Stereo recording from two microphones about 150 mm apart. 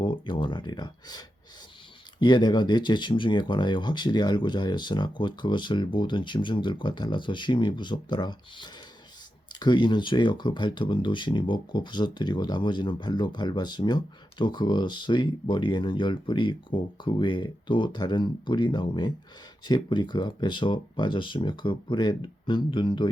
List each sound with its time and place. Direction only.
0.0 s speech: 30° left (ahead or behind)